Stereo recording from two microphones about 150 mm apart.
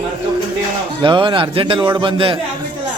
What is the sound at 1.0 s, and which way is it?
A man's voice, 35° right (ahead or behind).